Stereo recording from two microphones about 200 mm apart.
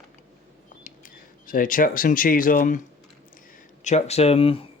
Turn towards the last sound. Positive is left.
turn(degrees=30)  # may be behind; listen again after turning